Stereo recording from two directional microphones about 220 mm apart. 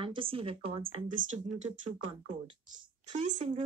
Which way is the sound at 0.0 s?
25° right (ahead or behind).